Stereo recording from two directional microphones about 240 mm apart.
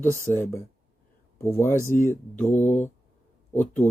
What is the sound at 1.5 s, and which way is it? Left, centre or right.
Speech, centre.